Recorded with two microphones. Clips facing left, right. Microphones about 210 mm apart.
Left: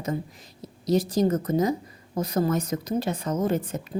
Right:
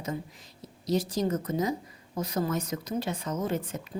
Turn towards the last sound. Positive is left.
turn(degrees=45)  # may be behind; listen again after turning